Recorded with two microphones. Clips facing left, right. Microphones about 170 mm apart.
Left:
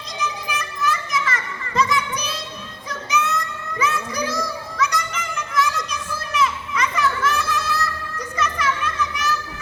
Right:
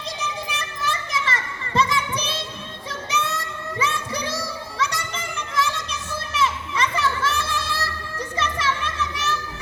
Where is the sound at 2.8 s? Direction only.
30° right (ahead or behind).